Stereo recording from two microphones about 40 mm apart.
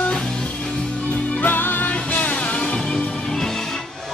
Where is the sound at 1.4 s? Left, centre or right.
Left.